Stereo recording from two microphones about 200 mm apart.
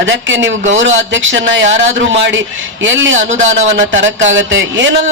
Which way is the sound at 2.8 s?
70° right (ahead or behind).